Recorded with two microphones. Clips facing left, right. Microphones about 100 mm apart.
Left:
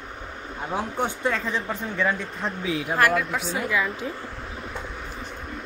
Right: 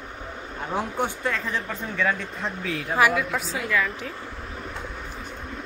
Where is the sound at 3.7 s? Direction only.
15° left (ahead or behind).